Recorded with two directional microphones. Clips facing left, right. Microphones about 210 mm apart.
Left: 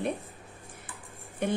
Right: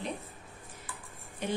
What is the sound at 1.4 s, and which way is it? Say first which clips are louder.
Speech: left 4 dB; 55° left (ahead or behind).